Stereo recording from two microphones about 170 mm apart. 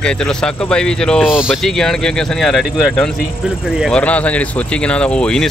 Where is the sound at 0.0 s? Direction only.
5° left (ahead or behind).